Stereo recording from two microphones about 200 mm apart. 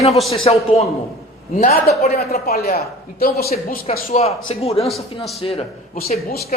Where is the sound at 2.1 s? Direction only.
50° left (ahead or behind).